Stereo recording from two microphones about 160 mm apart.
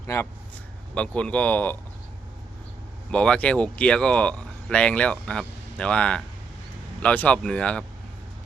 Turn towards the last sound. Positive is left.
turn(degrees=5)  # may be behind; listen again after turning